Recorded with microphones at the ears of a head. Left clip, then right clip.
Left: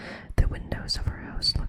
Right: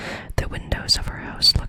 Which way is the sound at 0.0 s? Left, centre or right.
Right.